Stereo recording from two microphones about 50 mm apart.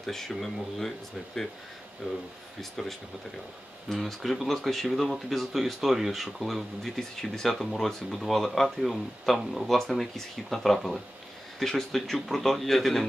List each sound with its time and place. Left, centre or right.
0.0 s speech: centre
2.0 s speech: right
2.8 s speech: centre